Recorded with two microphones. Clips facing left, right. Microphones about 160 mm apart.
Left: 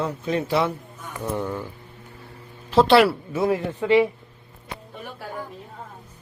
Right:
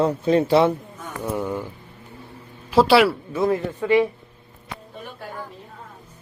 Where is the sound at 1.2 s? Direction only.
10° right (ahead or behind).